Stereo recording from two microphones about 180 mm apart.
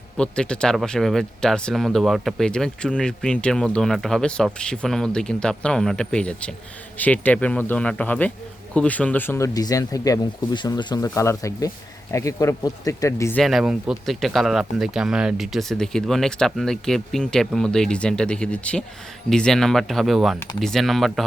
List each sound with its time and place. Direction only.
0.2 s speech: 5° left (ahead or behind)
13.4 s speech: centre (ahead or behind)